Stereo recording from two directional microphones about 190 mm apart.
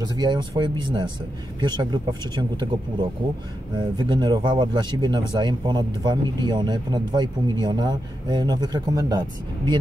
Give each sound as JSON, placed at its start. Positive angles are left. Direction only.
{"t": 0.0, "sound": "speech", "side_deg": -25}